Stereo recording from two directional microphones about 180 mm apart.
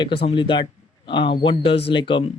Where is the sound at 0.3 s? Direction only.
25° left (ahead or behind).